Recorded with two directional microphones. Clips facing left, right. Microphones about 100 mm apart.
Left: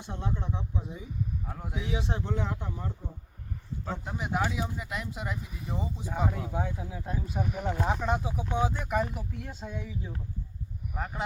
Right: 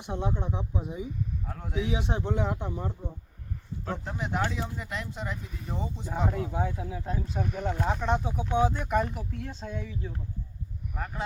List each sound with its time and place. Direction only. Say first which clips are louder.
0.0 s speech: right 4 dB; 20° right (ahead or behind)
1.5 s speech: right 3 dB; 5° left (ahead or behind)
1.8 s speech: right 4 dB; 20° right (ahead or behind)
4.0 s speech: left 1 dB; 5° left (ahead or behind)